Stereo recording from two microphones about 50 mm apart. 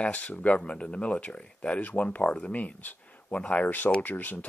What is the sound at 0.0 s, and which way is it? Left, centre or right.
Speech, left.